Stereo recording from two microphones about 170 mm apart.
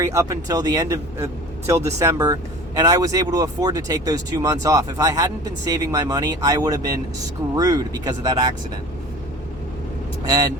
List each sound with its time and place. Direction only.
0.0 s speech: 15° right (ahead or behind)
10.2 s speech: 25° right (ahead or behind)